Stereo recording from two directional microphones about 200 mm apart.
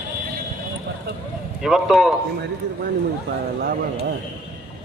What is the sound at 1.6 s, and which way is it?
Speech, centre (ahead or behind).